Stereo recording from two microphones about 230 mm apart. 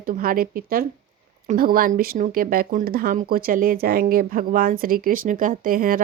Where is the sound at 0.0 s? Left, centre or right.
Right.